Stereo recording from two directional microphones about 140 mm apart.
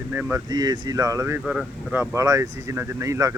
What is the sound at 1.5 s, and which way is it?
Speech, 10° right (ahead or behind).